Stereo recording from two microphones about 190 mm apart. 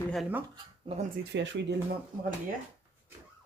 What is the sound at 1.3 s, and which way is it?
Speech, 70° right (ahead or behind).